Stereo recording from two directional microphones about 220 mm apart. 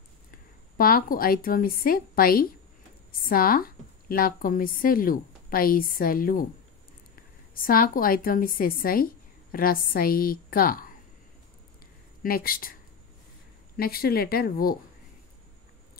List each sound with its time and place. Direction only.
0.3 s a woman's voice: 40° left (ahead or behind)
7.5 s a woman's voice: 40° left (ahead or behind)
12.2 s a woman's voice: 40° left (ahead or behind)
13.7 s speech: 45° left (ahead or behind)